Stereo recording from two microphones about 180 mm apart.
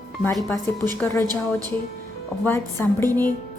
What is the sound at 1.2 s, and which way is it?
Speech, 20° right (ahead or behind).